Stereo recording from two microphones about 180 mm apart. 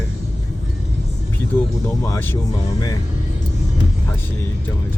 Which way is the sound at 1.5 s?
20° left (ahead or behind).